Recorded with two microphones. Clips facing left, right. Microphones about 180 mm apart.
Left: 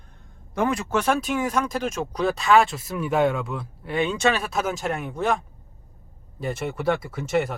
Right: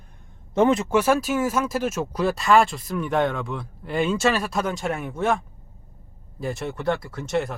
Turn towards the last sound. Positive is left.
turn(degrees=0)  # may be behind; listen again after turning